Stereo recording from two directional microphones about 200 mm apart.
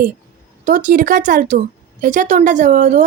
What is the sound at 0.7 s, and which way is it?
Speech, 40° right (ahead or behind).